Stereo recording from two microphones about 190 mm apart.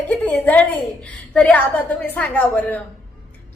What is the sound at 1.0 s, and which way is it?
A woman's voice, 5° left (ahead or behind).